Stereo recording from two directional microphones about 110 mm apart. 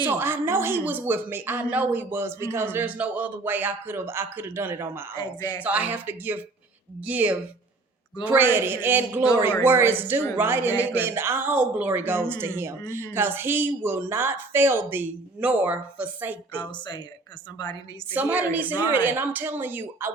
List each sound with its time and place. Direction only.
0.0 s a woman's voice: 20° right (ahead or behind)
5.1 s speech: 35° left (ahead or behind)
5.6 s a woman's voice: 15° right (ahead or behind)
16.6 s speech: 45° left (ahead or behind)
18.1 s a woman's voice: 15° right (ahead or behind)